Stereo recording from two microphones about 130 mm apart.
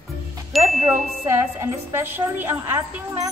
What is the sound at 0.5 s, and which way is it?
Chime, centre (ahead or behind).